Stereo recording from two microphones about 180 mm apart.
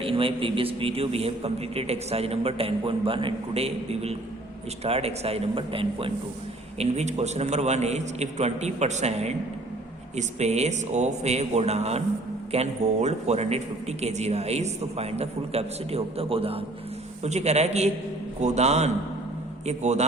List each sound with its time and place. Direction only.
0.0 s a man's voice: 30° right (ahead or behind)